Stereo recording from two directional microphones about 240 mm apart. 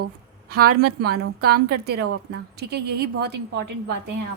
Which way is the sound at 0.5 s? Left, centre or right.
Right.